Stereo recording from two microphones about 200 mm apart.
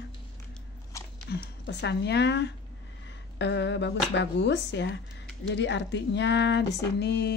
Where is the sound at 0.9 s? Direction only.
15° left (ahead or behind).